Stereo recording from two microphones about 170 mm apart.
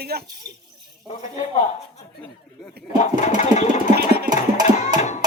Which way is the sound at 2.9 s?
45° left (ahead or behind).